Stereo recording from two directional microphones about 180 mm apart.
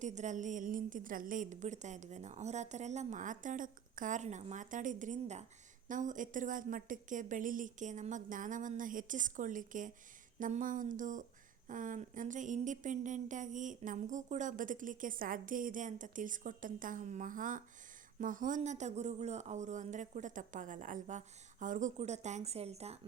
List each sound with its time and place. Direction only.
0.0 s speech: 40° right (ahead or behind)